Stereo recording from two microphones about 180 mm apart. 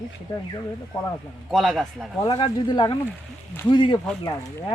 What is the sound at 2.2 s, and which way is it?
Speech, 30° left (ahead or behind).